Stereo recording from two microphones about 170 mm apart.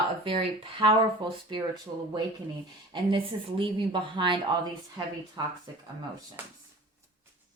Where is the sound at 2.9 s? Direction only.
30° right (ahead or behind).